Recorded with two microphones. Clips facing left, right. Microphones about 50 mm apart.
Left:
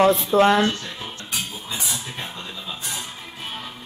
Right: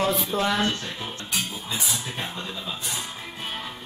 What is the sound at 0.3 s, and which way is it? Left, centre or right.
Speech, left.